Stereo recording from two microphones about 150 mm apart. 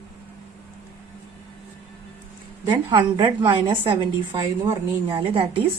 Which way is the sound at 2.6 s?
30° right (ahead or behind).